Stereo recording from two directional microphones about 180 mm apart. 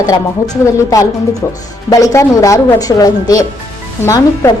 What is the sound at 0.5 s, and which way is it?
Speech, 20° left (ahead or behind).